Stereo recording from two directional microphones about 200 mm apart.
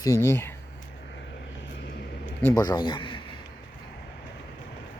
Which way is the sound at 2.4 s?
20° left (ahead or behind).